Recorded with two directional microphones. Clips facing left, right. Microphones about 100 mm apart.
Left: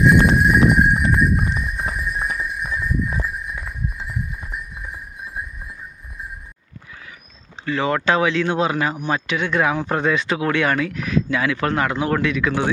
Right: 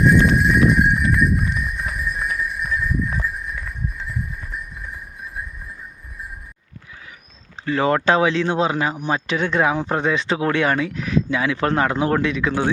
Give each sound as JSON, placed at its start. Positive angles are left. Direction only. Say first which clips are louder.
{"t": 0.2, "sound": "clip-clop", "louder": "left 1 dB", "side_deg": 30}
{"t": 7.6, "sound": "speech", "louder": "right 2 dB", "side_deg": -35}